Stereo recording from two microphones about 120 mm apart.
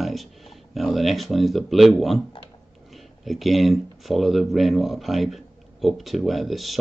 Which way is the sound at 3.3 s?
Centre (ahead or behind).